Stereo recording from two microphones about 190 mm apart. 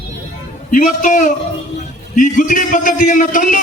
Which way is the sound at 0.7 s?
45° left (ahead or behind).